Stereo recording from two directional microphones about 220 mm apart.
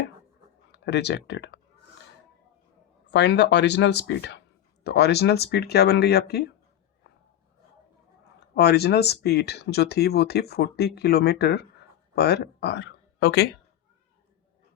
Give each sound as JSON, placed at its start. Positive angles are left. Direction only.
{"t": 0.7, "sound": "speech", "side_deg": 50}
{"t": 3.1, "sound": "speech", "side_deg": 50}
{"t": 8.4, "sound": "speech", "side_deg": 45}